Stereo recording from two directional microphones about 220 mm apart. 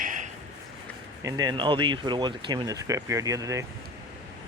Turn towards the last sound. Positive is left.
turn(degrees=-15)  # may be behind; listen again after turning